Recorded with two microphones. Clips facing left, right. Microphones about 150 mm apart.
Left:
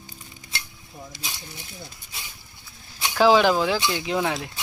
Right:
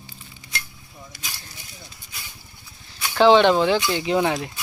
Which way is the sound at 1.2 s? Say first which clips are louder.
Even; 20° left (ahead or behind).